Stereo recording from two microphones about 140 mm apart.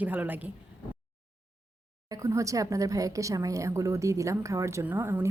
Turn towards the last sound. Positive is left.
turn(degrees=-15)  # may be behind; listen again after turning